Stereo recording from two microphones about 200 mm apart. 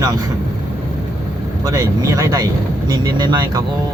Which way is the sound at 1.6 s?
20° right (ahead or behind).